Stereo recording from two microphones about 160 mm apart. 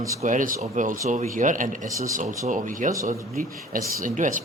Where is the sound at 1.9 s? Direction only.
20° right (ahead or behind).